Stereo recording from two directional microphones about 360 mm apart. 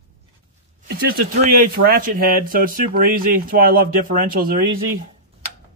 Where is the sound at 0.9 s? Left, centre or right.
Right.